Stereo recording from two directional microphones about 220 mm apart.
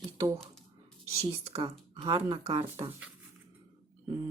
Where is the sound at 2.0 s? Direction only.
15° right (ahead or behind).